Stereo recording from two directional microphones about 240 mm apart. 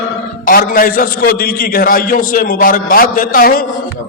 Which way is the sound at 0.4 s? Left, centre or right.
Left.